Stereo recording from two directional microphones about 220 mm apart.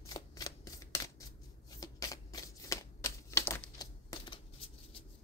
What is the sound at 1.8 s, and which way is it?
Shuffling cards, 15° left (ahead or behind).